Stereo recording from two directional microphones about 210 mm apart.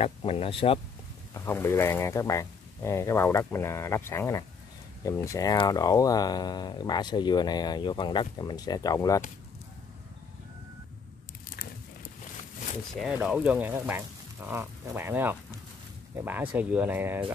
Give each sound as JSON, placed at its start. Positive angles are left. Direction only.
{"t": 0.0, "sound": "speech", "side_deg": 25}
{"t": 1.3, "sound": "speech", "side_deg": 15}
{"t": 12.9, "sound": "speech", "side_deg": -5}
{"t": 16.5, "sound": "speech", "side_deg": -5}